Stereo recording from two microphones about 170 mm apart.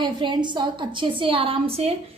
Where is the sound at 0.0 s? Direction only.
25° right (ahead or behind).